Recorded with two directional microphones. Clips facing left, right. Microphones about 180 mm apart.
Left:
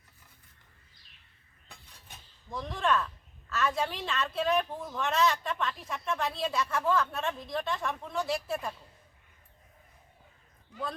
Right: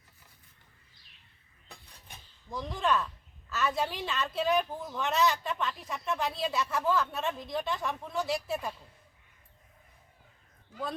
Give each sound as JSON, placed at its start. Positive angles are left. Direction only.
{"t": 2.5, "sound": "a woman's voice", "side_deg": 0}